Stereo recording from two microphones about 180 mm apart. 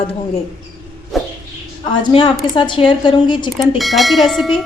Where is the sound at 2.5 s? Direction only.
25° left (ahead or behind).